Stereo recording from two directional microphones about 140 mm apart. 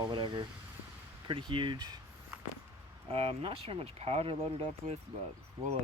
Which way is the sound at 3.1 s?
45° right (ahead or behind).